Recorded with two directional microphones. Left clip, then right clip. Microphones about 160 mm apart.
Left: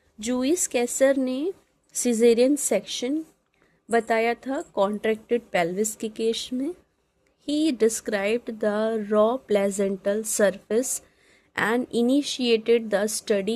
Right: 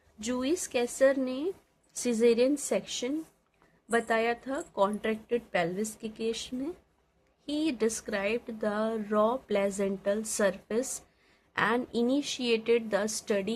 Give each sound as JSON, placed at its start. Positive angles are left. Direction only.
{"t": 0.2, "sound": "speech", "side_deg": 40}